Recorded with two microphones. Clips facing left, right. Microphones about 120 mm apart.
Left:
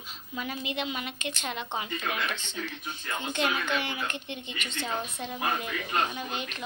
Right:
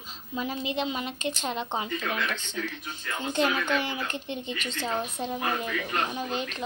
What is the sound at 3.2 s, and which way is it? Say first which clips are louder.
A woman's voice: right 4 dB; 35° right (ahead or behind).